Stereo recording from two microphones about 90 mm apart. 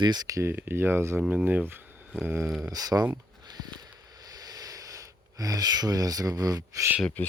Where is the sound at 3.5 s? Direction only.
50° right (ahead or behind).